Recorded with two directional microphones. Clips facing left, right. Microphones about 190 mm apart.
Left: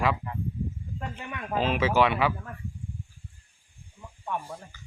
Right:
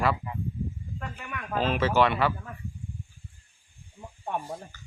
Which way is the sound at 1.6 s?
10° left (ahead or behind).